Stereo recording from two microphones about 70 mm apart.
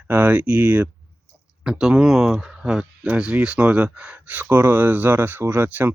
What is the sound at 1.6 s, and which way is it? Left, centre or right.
Speech, centre.